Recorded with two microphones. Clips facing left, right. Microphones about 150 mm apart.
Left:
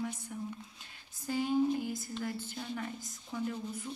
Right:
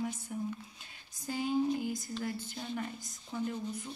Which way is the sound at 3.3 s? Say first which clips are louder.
Right 1 dB; 5° right (ahead or behind).